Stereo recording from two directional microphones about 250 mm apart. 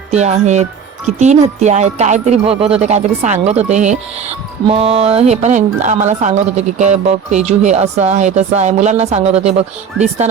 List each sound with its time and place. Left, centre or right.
0.1 s speech: right